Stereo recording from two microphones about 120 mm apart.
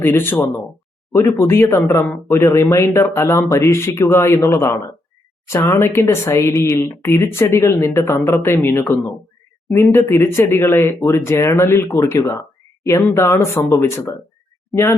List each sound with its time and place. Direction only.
0.0 s speech: 15° left (ahead or behind)